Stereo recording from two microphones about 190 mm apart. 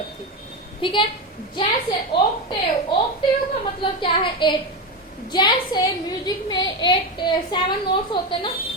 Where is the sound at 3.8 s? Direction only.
25° left (ahead or behind).